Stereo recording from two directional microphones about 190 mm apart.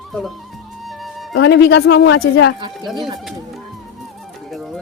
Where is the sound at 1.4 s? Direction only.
65° left (ahead or behind).